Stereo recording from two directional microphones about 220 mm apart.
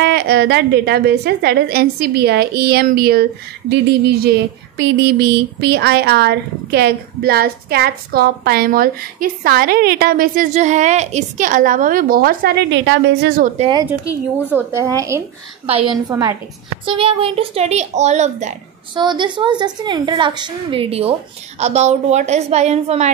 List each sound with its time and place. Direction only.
0.0 s a sound: 45° right (ahead or behind)
13.6 s a woman's voice: 30° right (ahead or behind)
14.5 s a woman's voice: 10° right (ahead or behind)
16.8 s a woman's voice: 25° right (ahead or behind)
18.9 s a woman's voice: 20° right (ahead or behind)